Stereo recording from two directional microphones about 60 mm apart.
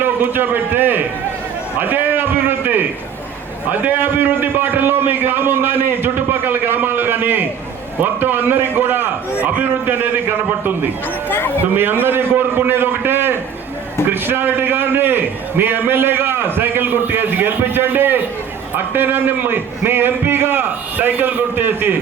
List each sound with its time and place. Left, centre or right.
0.0 s a man's voice: right
11.3 s speech: left
11.6 s a man's voice: right